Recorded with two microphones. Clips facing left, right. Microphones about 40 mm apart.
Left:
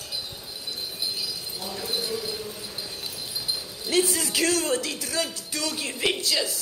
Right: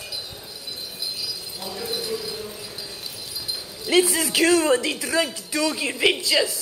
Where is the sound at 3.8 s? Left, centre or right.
Right.